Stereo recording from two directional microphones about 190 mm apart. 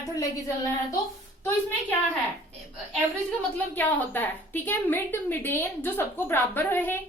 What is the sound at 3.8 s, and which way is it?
A woman's voice, 10° left (ahead or behind).